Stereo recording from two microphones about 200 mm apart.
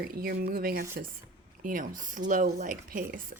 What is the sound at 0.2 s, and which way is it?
Speech, 50° right (ahead or behind).